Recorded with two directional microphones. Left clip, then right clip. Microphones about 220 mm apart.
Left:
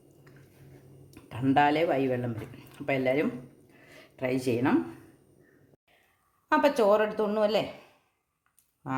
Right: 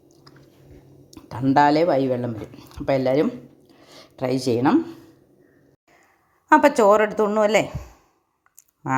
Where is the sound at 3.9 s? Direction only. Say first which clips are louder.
Right 6 dB; 25° right (ahead or behind).